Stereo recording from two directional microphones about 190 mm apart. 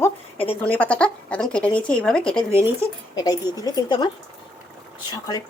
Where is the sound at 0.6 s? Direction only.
10° left (ahead or behind).